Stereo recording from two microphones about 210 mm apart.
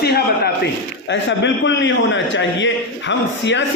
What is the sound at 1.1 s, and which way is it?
A man's voice, 60° left (ahead or behind).